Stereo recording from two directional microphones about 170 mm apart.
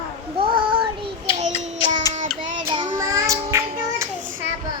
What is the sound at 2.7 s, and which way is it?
Child singing, 25° right (ahead or behind).